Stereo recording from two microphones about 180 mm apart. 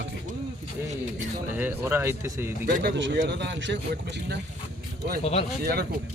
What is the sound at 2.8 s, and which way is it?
Speech, 80° right.